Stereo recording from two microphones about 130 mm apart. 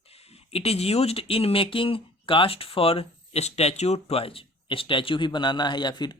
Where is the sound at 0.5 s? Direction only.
50° left (ahead or behind).